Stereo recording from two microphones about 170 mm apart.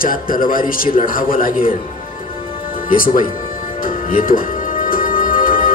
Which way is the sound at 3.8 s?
55° left (ahead or behind).